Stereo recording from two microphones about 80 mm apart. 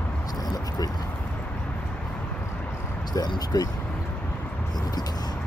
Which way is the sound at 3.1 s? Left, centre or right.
Left.